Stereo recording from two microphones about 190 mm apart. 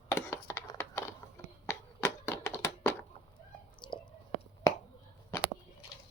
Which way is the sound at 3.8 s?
25° left (ahead or behind).